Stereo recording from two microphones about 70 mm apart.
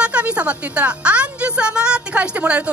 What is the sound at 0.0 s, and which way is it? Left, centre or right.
A woman's voice, centre.